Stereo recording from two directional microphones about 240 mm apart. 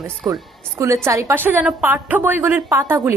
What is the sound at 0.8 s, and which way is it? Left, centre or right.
A woman's voice, centre.